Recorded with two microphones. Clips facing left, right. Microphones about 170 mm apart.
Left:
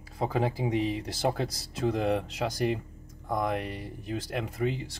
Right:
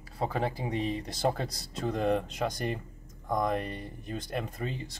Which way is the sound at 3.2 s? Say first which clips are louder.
Even; 10° left (ahead or behind).